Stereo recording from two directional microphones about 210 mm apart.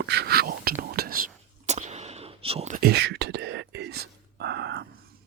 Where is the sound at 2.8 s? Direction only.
50° right (ahead or behind).